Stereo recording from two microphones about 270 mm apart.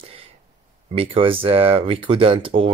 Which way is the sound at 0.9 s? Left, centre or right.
Centre.